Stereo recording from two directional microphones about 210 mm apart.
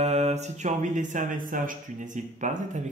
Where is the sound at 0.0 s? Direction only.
30° right (ahead or behind).